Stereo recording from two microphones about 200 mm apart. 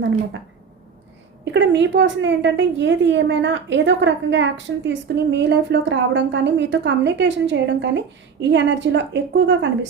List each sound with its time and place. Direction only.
1.5 s a woman's voice: 65° right (ahead or behind)